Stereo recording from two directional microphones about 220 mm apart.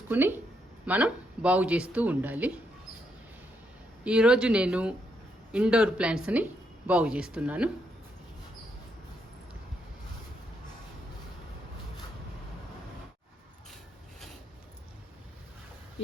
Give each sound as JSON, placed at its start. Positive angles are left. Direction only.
{"t": 0.1, "sound": "a woman's voice", "side_deg": -10}
{"t": 4.0, "sound": "speech", "side_deg": -5}